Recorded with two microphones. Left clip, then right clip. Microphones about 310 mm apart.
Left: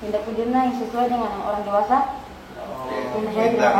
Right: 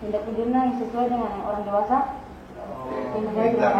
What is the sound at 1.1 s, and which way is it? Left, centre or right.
Speech, centre.